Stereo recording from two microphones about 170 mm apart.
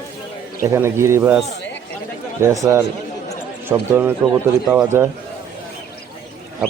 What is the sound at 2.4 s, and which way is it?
A man's voice, 15° right (ahead or behind).